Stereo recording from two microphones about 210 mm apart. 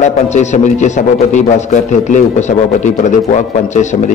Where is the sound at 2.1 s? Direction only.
35° left (ahead or behind).